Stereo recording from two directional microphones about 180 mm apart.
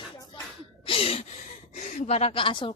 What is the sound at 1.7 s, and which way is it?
A woman's voice, 40° left (ahead or behind).